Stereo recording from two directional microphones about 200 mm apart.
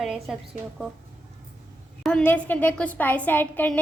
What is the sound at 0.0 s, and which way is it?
Speech, centre (ahead or behind).